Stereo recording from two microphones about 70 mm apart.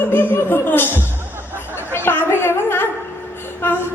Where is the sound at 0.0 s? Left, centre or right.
Left.